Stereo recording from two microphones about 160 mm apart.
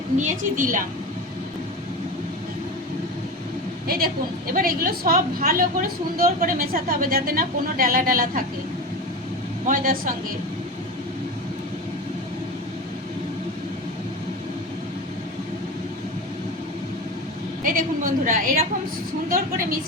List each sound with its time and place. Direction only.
0.2 s a woman's voice: 50° right (ahead or behind)
3.8 s a woman's voice: 70° right (ahead or behind)
9.6 s a woman's voice: 60° right (ahead or behind)
17.6 s a woman's voice: 60° right (ahead or behind)